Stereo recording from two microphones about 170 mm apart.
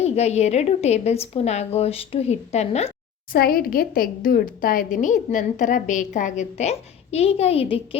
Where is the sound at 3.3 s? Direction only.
60° left (ahead or behind); by 7.8 s 35° left (ahead or behind).